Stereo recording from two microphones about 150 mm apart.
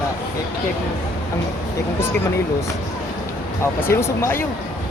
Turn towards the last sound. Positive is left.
turn(degrees=15)  # may be behind; listen again after turning